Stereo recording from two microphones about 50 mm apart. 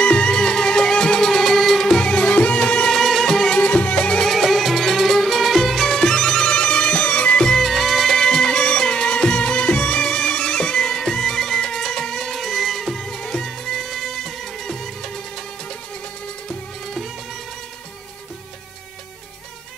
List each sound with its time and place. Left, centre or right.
0.0 s music: centre
3.0 s music: centre
3.5 s music: left
4.3 s music: centre; by 7.4 s left
7.4 s music: centre
8.2 s music: centre